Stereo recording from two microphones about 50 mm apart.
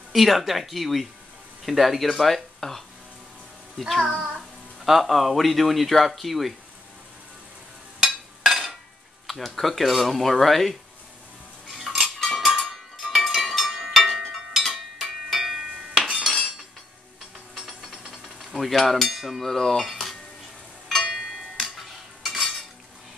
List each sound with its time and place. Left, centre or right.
0.1 s speech: centre
4.0 s speech: centre
8.0 s a sound: centre
9.3 s speech: centre
11.6 s cutlery: centre
12.4 s a sound: centre
17.6 s mechanisms: centre
19.4 s cutlery: centre
19.9 s dishes: centre
21.5 s cutlery: centre